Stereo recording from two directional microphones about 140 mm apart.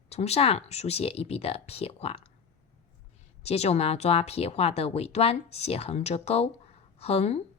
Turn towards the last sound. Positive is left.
turn(degrees=50)  # may be behind; listen again after turning